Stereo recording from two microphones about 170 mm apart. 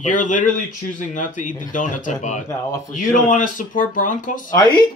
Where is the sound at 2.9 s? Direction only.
50° left (ahead or behind).